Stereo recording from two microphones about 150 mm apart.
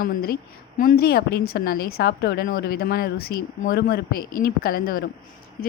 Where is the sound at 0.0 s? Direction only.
85° left.